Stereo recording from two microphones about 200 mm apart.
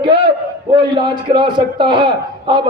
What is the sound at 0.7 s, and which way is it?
Speech, 25° right (ahead or behind).